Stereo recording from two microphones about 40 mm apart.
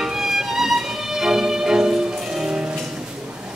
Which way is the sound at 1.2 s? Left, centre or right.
Centre.